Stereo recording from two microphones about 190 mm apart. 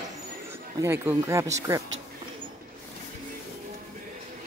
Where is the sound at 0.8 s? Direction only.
10° right (ahead or behind).